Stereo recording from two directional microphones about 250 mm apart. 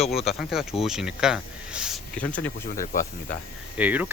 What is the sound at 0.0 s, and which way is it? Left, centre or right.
Speech, centre.